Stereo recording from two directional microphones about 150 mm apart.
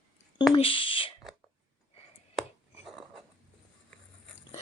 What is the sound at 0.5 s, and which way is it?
Speech, 35° left (ahead or behind).